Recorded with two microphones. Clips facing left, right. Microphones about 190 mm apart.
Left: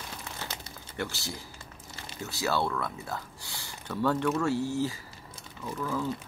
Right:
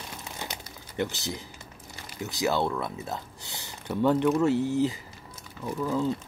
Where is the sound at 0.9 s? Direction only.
20° right (ahead or behind).